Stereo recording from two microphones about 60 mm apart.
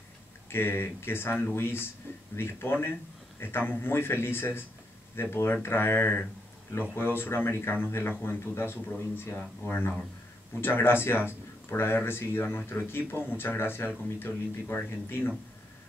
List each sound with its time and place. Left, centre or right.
0.5 s speech: left
10.6 s speech: left